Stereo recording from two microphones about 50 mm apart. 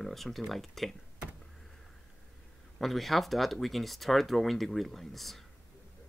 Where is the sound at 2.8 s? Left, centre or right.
Centre.